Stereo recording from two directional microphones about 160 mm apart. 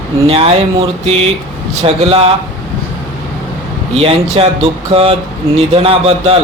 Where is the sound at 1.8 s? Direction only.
40° right (ahead or behind).